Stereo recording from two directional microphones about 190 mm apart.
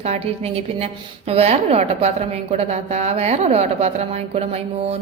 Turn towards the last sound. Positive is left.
turn(degrees=-35)  # may be behind; listen again after turning